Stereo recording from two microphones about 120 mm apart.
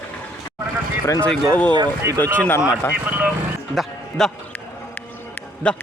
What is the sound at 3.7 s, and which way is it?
Music, 5° left (ahead or behind).